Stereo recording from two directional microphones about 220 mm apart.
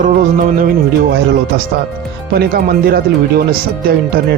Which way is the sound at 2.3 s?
45° right (ahead or behind).